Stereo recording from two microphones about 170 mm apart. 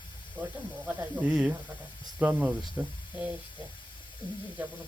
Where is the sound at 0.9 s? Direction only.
10° right (ahead or behind).